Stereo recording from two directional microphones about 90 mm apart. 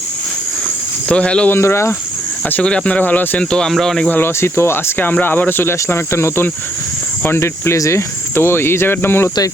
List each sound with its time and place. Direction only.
1.0 s speech: 10° left (ahead or behind)
1.5 s speech: 30° left (ahead or behind)
2.5 s speech: 10° left (ahead or behind)
4.1 s speech: 25° left (ahead or behind)